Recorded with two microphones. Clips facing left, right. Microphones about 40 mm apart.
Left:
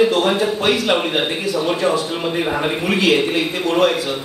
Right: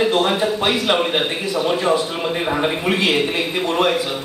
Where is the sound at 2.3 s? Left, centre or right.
Centre.